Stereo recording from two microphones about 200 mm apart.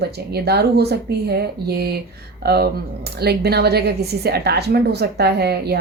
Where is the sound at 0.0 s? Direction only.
55° right (ahead or behind).